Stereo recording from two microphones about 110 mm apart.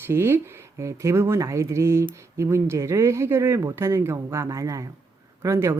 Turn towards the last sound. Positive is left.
turn(degrees=-25)  # may be behind; listen again after turning